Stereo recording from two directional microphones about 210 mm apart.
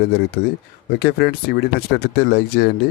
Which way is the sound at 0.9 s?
50° left (ahead or behind).